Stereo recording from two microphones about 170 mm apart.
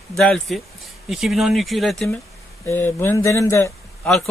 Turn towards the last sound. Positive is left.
turn(degrees=0)  # may be behind; listen again after turning